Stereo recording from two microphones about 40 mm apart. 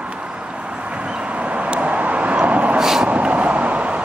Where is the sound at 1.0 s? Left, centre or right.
Right.